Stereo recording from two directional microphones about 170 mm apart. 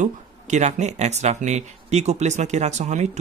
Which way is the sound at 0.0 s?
45° right (ahead or behind).